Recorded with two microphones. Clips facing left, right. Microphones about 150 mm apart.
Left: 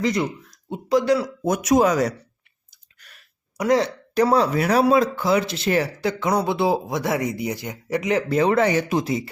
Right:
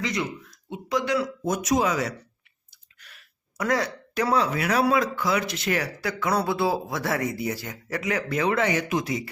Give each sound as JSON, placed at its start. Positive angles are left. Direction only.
{"t": 0.0, "sound": "speech", "side_deg": 35}
{"t": 1.5, "sound": "speech", "side_deg": 60}
{"t": 1.8, "sound": "speech", "side_deg": 40}
{"t": 3.0, "sound": "a sound", "side_deg": 45}
{"t": 3.6, "sound": "speech", "side_deg": 20}
{"t": 4.1, "sound": "speech", "side_deg": 35}